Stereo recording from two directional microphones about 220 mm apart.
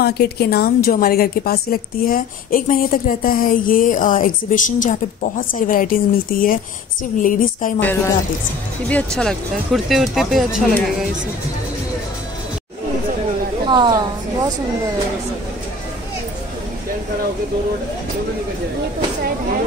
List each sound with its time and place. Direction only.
0.0 s a woman's voice: 45° left (ahead or behind)
7.8 s speech: 10° left (ahead or behind)
13.7 s a woman's voice: 20° right (ahead or behind)